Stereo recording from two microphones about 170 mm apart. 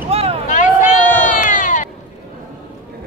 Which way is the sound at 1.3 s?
50° left (ahead or behind).